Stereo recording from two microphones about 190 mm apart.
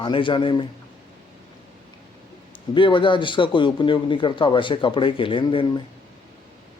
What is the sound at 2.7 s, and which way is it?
Speech, 25° left (ahead or behind).